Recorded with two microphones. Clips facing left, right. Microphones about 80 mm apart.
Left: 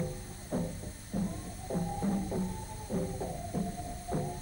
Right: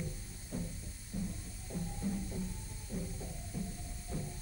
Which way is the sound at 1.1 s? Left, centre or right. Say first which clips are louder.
Left 6 dB; left.